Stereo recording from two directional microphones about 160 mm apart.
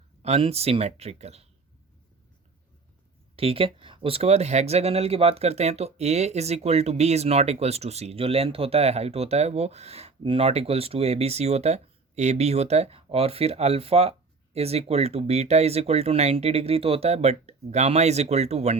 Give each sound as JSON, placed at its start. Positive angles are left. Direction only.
{"t": 0.2, "sound": "speech", "side_deg": -40}
{"t": 3.3, "sound": "speech", "side_deg": -35}